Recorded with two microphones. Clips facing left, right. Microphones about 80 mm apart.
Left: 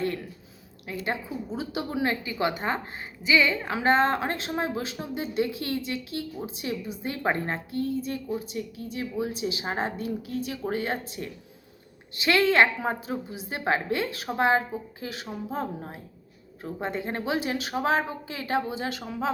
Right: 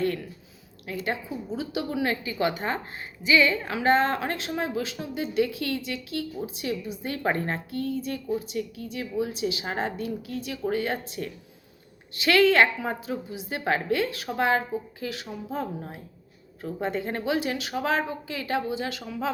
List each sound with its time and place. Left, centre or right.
1.5 s a woman's voice: left
7.0 s a woman's voice: left